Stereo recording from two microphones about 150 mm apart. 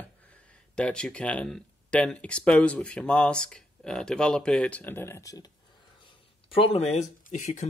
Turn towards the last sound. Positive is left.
turn(degrees=55)  # may be behind; listen again after turning